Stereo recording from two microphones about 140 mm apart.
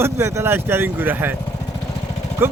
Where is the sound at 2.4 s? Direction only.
15° right (ahead or behind).